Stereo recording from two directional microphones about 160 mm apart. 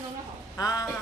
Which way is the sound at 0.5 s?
20° left (ahead or behind).